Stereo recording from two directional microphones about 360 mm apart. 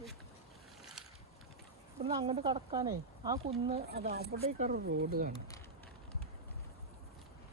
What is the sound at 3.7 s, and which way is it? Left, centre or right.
Speech, right.